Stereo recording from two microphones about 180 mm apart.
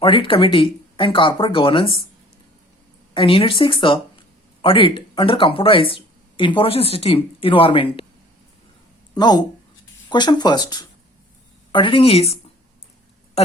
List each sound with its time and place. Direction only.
0.0 s speech: 30° left (ahead or behind)
3.2 s speech: 30° left (ahead or behind)
9.1 s speech: 20° left (ahead or behind)